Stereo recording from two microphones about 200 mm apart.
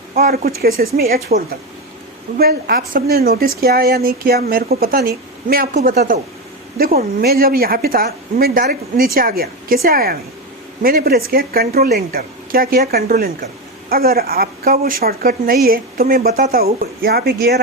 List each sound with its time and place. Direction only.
0.1 s speech: 45° right (ahead or behind)